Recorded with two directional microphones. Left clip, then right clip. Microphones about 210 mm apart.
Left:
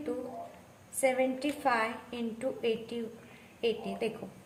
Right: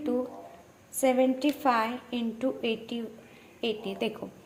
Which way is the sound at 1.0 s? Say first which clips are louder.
Right 4 dB; 25° right (ahead or behind).